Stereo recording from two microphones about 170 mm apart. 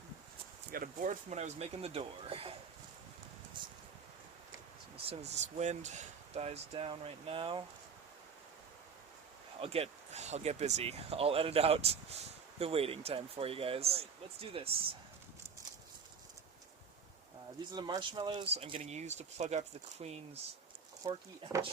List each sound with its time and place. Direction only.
0.7 s speech: 55° right (ahead or behind); by 2.6 s 35° right (ahead or behind)
5.0 s speech: 40° right (ahead or behind)
9.6 s speech: 35° right (ahead or behind)
17.7 s speech: 25° right (ahead or behind)
21.0 s speech: 25° right (ahead or behind)